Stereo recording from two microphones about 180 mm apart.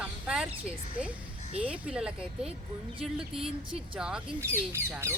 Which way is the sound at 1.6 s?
5° right (ahead or behind).